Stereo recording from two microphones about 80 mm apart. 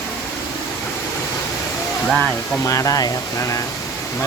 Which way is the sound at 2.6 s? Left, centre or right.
Left.